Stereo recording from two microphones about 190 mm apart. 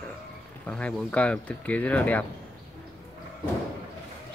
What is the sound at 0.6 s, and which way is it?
Speech, 5° left (ahead or behind).